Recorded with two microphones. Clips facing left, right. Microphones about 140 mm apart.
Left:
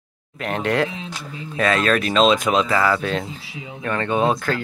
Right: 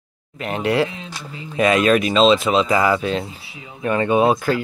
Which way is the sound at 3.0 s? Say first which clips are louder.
Right 2 dB; centre (ahead or behind).